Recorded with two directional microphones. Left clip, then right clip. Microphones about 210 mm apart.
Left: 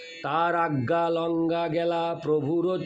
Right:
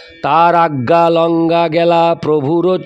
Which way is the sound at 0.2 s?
55° right (ahead or behind).